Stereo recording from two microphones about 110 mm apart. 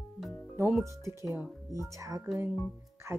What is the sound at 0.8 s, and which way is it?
Speech, 25° right (ahead or behind).